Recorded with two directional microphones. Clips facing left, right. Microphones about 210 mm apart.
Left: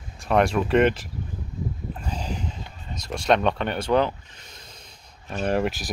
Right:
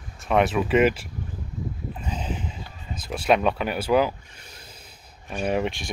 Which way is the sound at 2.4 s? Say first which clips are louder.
Left 1 dB; 5° right (ahead or behind).